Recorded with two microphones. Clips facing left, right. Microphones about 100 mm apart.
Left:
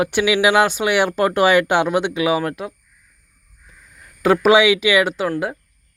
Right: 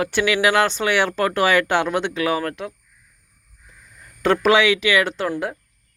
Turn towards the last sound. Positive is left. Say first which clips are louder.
# left 3 dB
turn(degrees=10)  # may be behind; listen again after turning